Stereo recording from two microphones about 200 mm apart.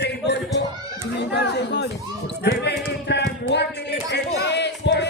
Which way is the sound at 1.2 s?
55° left (ahead or behind).